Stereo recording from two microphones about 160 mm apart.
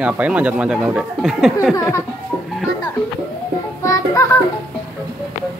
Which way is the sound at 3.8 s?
20° left (ahead or behind).